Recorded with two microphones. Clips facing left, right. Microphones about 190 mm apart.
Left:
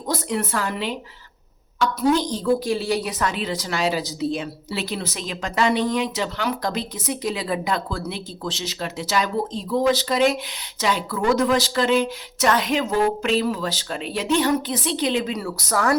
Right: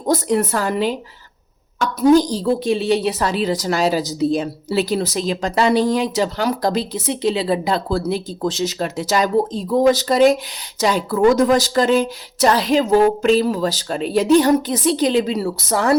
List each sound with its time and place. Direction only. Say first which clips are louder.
0.1 s a woman's voice: right 7 dB; 40° right (ahead or behind)
2.0 s a woman's voice: right 7 dB; 35° right (ahead or behind)